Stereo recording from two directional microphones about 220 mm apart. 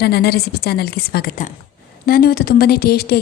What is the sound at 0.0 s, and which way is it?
A woman's voice, 45° left (ahead or behind).